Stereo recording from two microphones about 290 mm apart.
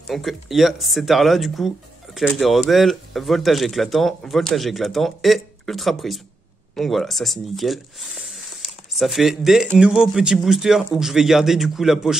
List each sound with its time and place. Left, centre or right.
0.1 s speech: centre